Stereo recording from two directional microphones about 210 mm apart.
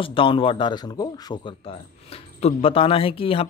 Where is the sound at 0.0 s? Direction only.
25° left (ahead or behind).